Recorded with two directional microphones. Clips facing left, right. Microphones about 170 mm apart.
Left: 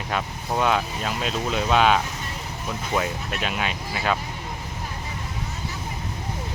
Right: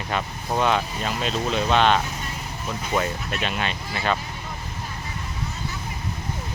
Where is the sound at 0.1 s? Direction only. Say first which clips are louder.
Even; centre (ahead or behind).